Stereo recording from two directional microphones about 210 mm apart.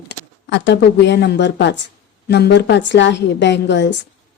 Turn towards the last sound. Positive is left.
turn(degrees=55)  # may be behind; listen again after turning